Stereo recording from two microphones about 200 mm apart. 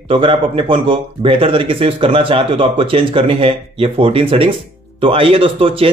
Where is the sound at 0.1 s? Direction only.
25° right (ahead or behind).